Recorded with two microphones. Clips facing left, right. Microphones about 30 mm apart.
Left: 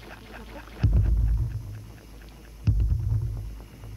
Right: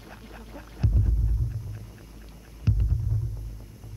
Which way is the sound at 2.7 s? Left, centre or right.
Centre.